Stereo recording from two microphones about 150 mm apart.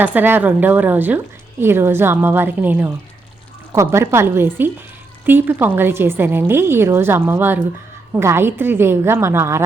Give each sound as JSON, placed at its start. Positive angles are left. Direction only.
{"t": 0.0, "sound": "a woman's voice", "side_deg": -10}